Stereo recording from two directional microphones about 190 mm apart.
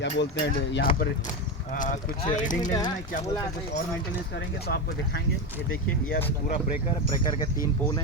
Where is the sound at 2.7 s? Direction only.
20° left (ahead or behind).